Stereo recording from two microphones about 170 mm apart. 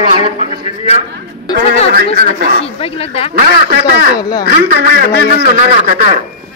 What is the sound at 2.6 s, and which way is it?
Speech, 35° left (ahead or behind).